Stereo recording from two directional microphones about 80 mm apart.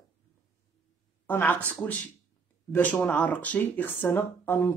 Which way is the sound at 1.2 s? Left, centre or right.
Left.